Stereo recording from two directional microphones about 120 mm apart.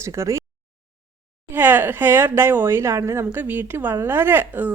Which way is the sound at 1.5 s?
15° right (ahead or behind).